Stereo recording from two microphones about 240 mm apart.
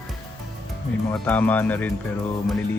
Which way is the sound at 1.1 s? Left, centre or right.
Centre.